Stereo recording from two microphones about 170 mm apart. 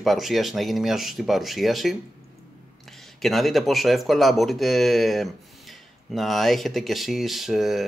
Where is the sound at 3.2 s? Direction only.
Centre (ahead or behind).